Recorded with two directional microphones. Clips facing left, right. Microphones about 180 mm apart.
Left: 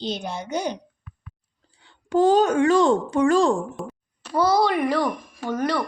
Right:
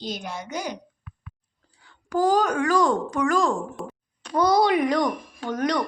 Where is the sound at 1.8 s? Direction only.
25° left (ahead or behind).